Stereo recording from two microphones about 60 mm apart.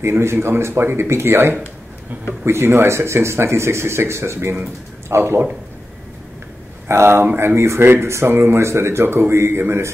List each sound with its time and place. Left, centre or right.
0.0 s speech: right
6.9 s speech: right